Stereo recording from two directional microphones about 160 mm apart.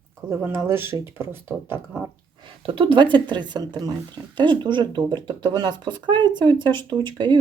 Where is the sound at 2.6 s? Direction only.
35° right (ahead or behind).